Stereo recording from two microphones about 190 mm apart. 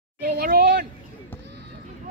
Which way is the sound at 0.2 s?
50° right (ahead or behind).